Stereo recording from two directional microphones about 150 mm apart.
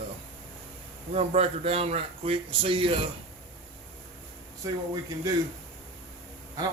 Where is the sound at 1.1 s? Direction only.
45° right (ahead or behind).